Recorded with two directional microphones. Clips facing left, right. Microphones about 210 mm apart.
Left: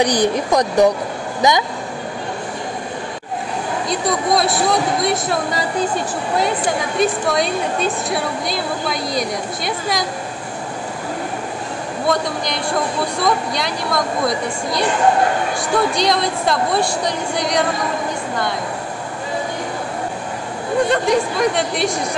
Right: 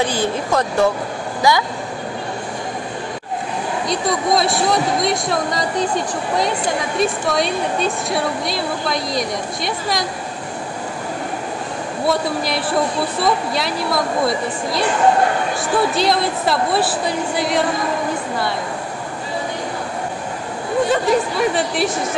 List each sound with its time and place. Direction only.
0.0 s speech: 15° left (ahead or behind)
3.9 s a woman's voice: centre (ahead or behind)
12.1 s a woman's voice: 5° right (ahead or behind)
20.9 s a woman's voice: 5° right (ahead or behind)